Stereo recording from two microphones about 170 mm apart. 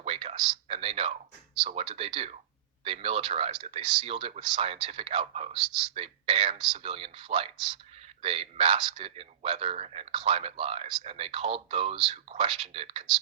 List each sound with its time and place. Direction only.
0.0 s speech: 35° right (ahead or behind)